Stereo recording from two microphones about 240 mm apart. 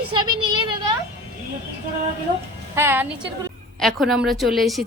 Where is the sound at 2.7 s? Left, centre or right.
Centre.